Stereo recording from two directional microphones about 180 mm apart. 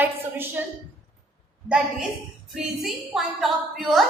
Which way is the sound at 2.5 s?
Centre (ahead or behind).